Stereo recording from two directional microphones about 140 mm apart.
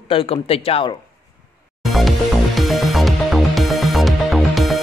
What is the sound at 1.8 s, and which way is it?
Music, centre (ahead or behind).